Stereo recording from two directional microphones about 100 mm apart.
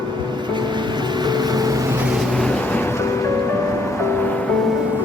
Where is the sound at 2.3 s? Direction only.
10° left (ahead or behind).